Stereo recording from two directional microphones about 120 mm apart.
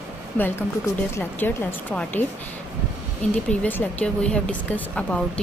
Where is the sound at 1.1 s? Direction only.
20° left (ahead or behind).